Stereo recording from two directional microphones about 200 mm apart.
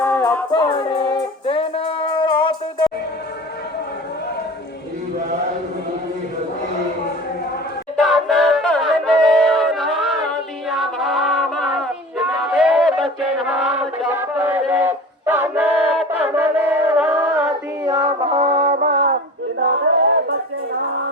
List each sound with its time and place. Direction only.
0.0 s music: 10° left (ahead or behind)
0.5 s music: 25° left (ahead or behind)
7.9 s a sound: centre (ahead or behind)
16.0 s chant: 10° right (ahead or behind)
17.8 s music: 20° right (ahead or behind)
18.6 s a sound: 50° right (ahead or behind)